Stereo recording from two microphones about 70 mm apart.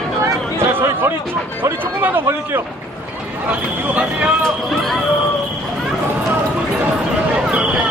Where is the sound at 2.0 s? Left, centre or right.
Right.